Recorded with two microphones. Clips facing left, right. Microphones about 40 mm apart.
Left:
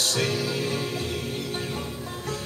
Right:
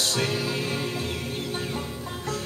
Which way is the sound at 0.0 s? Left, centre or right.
Centre.